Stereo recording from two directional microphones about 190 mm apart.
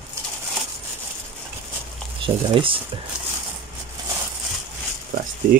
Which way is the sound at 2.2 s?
25° right (ahead or behind).